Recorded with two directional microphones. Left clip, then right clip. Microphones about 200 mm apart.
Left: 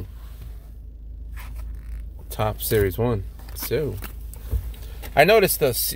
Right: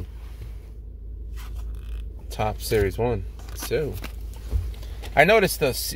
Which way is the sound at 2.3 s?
25° left (ahead or behind).